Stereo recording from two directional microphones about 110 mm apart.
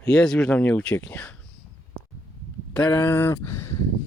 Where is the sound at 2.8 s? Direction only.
25° left (ahead or behind).